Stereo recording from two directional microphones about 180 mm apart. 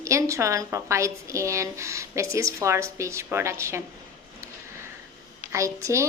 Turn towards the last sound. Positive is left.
turn(degrees=-15)  # may be behind; listen again after turning